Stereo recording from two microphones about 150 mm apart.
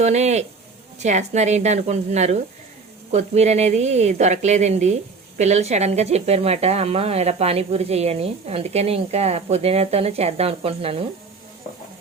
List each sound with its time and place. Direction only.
0.0 s speech: 50° right (ahead or behind)